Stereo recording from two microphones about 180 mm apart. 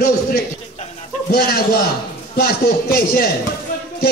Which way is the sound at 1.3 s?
60° left (ahead or behind).